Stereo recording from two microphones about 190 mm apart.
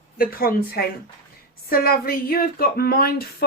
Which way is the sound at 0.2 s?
50° left (ahead or behind).